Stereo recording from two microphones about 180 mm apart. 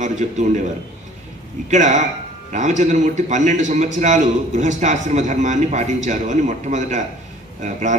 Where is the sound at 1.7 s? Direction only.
40° right (ahead or behind).